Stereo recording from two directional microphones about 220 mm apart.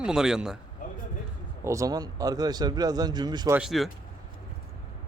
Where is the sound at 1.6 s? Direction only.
15° right (ahead or behind).